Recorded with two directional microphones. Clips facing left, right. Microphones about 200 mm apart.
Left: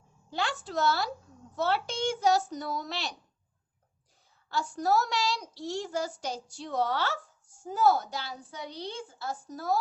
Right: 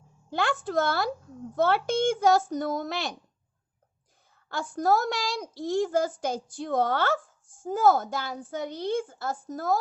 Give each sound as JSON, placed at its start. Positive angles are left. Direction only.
{"t": 0.3, "sound": "a child's voice", "side_deg": -55}
{"t": 4.4, "sound": "a child's voice", "side_deg": -55}